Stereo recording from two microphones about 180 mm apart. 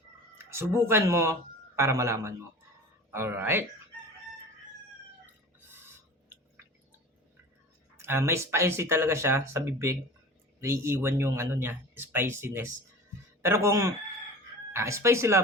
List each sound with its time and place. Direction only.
0.5 s speech: 15° right (ahead or behind)
5.2 s chicken: 10° right (ahead or behind)
7.9 s speech: 15° right (ahead or behind)